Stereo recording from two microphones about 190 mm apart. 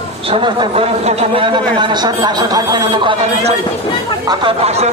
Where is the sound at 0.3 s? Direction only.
30° right (ahead or behind).